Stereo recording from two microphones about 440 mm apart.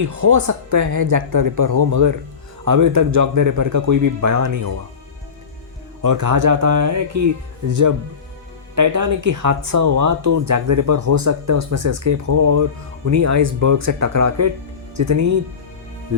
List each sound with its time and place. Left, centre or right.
0.0 s speech: right
6.0 s speech: right
8.7 s speech: right